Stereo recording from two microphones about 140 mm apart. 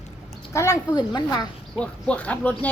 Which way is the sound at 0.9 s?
30° left (ahead or behind).